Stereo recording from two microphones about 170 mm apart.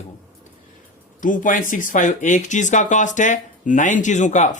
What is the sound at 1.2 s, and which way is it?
Speech, 50° left (ahead or behind).